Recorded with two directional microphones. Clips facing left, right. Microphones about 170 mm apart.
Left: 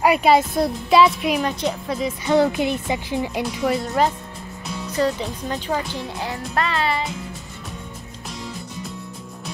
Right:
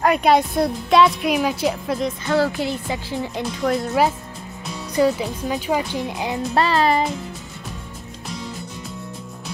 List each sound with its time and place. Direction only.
0.0 s speech: 5° left (ahead or behind)
2.2 s speech: 20° left (ahead or behind)
3.4 s speech: centre (ahead or behind); by 6.4 s 15° right (ahead or behind)
6.5 s music: 35° right (ahead or behind)